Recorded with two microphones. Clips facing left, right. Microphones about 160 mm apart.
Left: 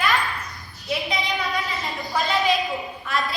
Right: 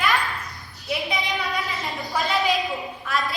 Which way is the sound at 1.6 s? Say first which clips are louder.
Even; centre (ahead or behind).